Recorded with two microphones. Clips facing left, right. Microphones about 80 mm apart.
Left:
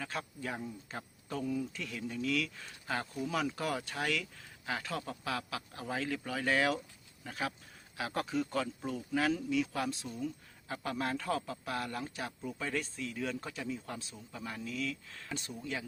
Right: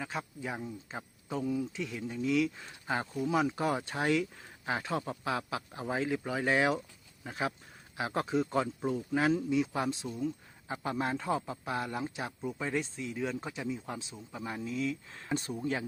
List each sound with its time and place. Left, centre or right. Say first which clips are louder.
0.0 s speech: right 2 dB; centre; by 15.9 s right